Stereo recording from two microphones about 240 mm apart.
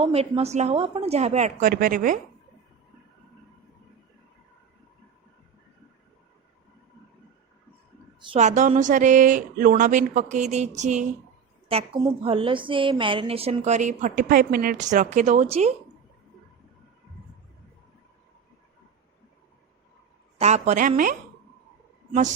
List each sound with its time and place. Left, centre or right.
0.0 s a woman's voice: right
8.2 s a woman's voice: right
20.4 s speech: right